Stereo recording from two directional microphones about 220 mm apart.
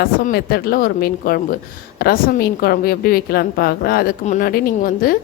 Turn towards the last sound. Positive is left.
turn(degrees=40)  # may be behind; listen again after turning